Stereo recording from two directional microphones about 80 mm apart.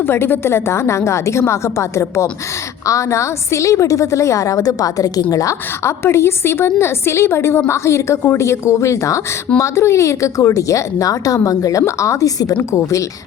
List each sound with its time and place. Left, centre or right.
0.0 s a woman's voice: left